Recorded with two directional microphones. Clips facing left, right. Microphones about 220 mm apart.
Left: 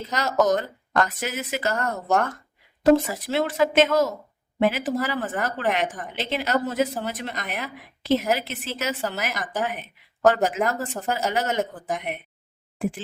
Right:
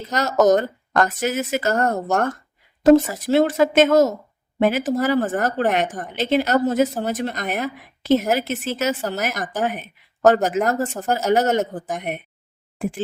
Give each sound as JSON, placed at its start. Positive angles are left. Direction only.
{"t": 0.1, "sound": "speech", "side_deg": -45}